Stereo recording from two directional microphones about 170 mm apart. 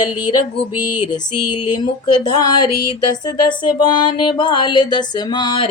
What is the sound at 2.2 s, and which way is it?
Speech, 25° left (ahead or behind).